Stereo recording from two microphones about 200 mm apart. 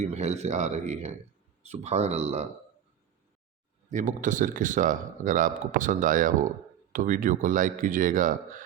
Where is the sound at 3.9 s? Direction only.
40° right (ahead or behind).